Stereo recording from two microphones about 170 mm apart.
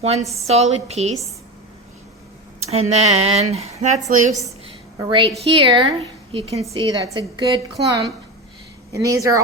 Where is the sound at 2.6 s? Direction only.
40° right (ahead or behind).